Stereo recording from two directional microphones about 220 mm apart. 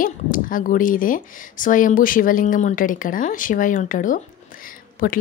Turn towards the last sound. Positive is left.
turn(degrees=40)  # may be behind; listen again after turning